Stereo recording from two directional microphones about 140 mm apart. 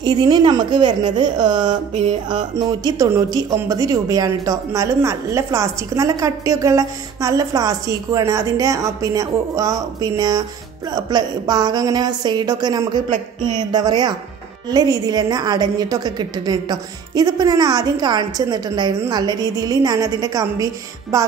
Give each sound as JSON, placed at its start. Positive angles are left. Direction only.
{"t": 0.0, "sound": "speech", "side_deg": -30}